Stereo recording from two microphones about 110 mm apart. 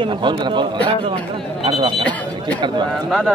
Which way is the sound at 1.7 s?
55° right (ahead or behind).